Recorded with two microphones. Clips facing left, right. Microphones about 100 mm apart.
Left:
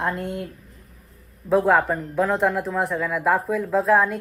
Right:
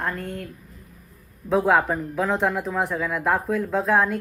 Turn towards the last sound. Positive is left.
turn(degrees=0)  # may be behind; listen again after turning